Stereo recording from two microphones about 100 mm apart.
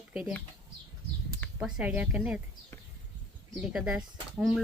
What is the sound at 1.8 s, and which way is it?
Speech, 15° right (ahead or behind).